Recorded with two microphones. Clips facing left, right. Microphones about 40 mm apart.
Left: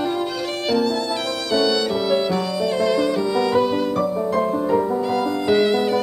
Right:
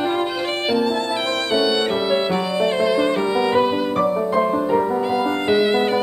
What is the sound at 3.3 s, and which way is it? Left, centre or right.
Violin, right.